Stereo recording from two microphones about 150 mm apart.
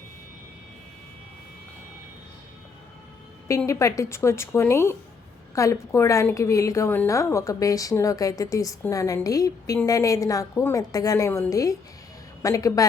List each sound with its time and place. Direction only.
3.7 s a woman's voice: 20° left (ahead or behind)